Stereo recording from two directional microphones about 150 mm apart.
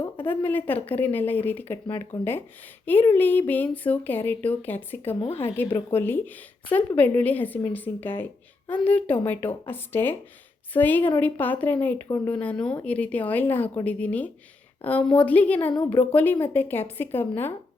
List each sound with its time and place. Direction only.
0.3 s a woman's voice: 15° left (ahead or behind)
2.8 s a woman's voice: 15° left (ahead or behind)
12.3 s a woman's voice: 10° left (ahead or behind)